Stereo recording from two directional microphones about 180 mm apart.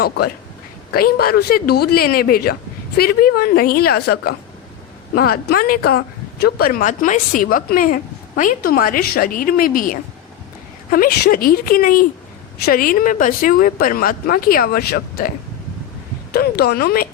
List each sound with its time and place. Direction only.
0.9 s speech: 55° left (ahead or behind)
16.3 s speech: 60° left (ahead or behind)